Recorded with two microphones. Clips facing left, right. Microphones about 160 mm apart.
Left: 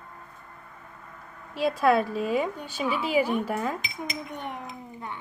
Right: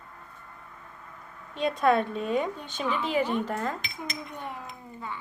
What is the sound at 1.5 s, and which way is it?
A woman's voice, 5° left (ahead or behind).